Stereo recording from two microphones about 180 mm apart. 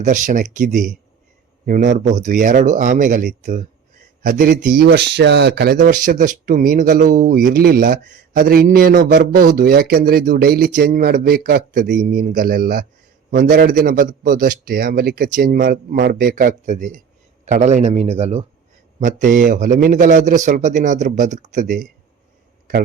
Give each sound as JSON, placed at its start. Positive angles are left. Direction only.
{"t": 0.0, "sound": "a man's voice", "side_deg": -45}
{"t": 4.8, "sound": "speech", "side_deg": -65}
{"t": 5.7, "sound": "a man's voice", "side_deg": -50}
{"t": 18.9, "sound": "a man's voice", "side_deg": -45}